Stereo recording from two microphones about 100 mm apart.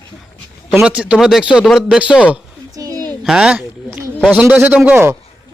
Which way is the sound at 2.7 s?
40° right (ahead or behind).